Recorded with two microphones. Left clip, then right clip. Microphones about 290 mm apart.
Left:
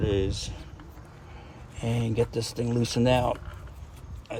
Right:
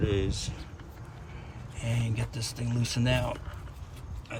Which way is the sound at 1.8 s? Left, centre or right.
Centre.